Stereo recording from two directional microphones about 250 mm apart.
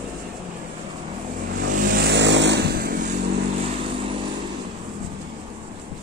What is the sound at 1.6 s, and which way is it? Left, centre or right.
Vehicle, right.